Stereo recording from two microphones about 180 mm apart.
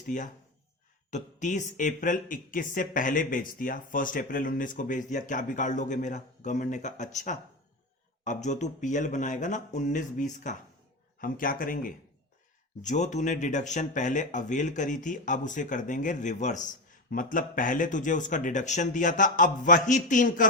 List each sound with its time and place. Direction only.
1.1 s speech: 40° left (ahead or behind)